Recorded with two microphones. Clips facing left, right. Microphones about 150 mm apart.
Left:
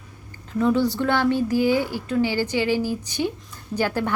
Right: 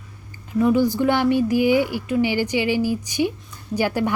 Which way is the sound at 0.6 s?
10° right (ahead or behind).